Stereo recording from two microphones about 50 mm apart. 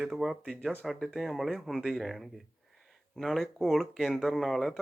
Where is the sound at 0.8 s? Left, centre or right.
Centre.